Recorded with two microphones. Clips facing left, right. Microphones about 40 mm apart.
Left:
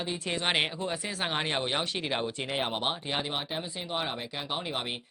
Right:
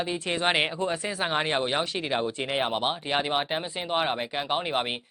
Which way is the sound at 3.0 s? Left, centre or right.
Right.